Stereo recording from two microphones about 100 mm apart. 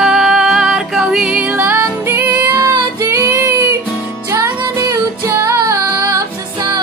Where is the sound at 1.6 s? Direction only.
25° right (ahead or behind).